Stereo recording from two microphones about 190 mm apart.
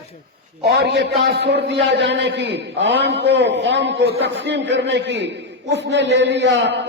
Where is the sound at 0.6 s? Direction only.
60° right (ahead or behind).